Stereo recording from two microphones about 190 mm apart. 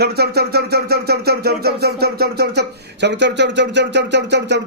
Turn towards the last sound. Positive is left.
turn(degrees=-65)  # may be behind; listen again after turning